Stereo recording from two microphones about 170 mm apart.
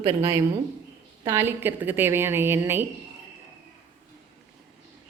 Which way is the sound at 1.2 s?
15° right (ahead or behind).